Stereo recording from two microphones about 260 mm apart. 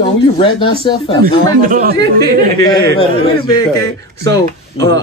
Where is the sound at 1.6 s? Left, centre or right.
Right.